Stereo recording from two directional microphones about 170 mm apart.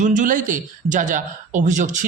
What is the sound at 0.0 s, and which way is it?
A man's voice, 50° right (ahead or behind).